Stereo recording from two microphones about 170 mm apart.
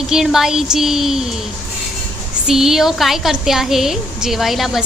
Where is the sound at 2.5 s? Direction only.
Centre (ahead or behind).